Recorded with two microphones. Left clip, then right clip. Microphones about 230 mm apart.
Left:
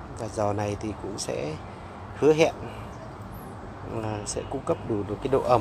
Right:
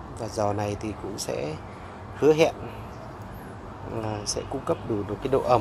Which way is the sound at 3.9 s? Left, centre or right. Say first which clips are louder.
Right 1 dB; centre.